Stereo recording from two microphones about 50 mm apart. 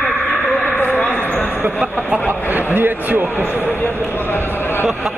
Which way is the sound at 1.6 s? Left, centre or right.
Right.